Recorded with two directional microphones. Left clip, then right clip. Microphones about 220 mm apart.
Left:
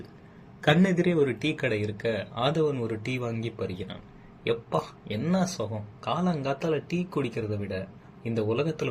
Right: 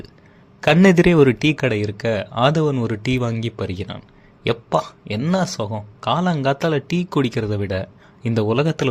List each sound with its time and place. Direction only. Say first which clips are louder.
0.6 s speech: right 10 dB; 50° right (ahead or behind)